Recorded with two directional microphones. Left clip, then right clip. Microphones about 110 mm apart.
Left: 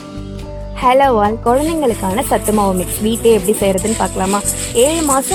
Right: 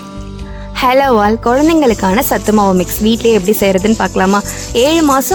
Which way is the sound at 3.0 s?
30° right (ahead or behind).